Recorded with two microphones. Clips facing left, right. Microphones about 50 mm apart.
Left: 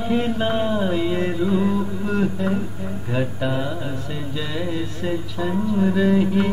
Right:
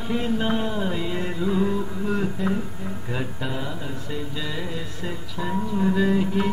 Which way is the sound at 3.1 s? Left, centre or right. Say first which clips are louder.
Left 7 dB; centre.